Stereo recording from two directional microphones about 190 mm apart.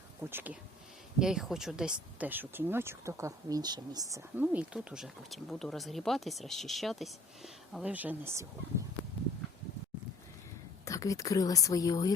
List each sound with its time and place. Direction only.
0.3 s speech: 10° right (ahead or behind)
10.8 s speech: 15° left (ahead or behind)